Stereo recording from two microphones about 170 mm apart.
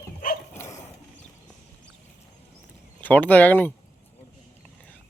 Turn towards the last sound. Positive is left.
turn(degrees=10)  # may be behind; listen again after turning